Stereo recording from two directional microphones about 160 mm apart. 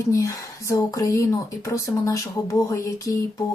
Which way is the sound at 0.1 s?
20° left (ahead or behind).